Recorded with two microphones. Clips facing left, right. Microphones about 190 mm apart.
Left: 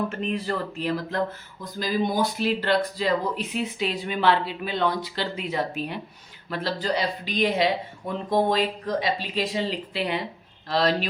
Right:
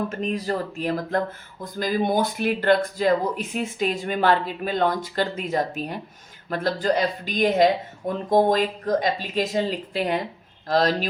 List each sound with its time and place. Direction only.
0.1 s speech: 40° right (ahead or behind)